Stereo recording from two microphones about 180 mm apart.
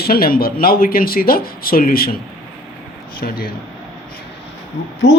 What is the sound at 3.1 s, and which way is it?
Speech, 55° left (ahead or behind).